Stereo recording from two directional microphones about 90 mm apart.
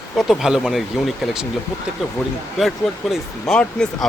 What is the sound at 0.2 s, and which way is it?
Speech, 5° right (ahead or behind).